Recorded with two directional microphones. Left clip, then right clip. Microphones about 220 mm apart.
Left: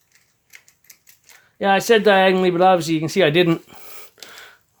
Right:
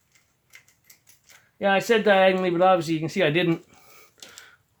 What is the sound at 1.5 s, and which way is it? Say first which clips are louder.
Speech: left 5 dB; 40° left (ahead or behind).